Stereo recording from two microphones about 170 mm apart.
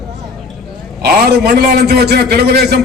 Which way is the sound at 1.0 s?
65° right (ahead or behind).